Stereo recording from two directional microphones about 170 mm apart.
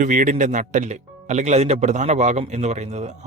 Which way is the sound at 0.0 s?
50° right (ahead or behind).